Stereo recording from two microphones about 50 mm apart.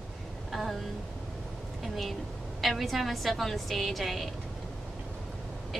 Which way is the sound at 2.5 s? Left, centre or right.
Centre.